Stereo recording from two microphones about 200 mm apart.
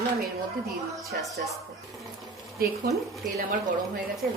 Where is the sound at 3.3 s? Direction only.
45° right (ahead or behind).